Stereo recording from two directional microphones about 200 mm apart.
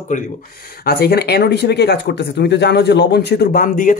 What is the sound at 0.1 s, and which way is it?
Speech, 50° left (ahead or behind).